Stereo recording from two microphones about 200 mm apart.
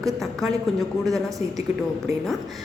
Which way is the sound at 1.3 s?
15° right (ahead or behind).